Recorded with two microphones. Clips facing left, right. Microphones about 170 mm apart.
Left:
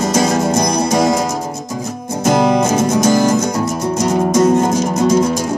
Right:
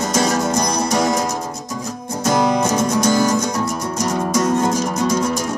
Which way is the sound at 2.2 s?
25° left (ahead or behind).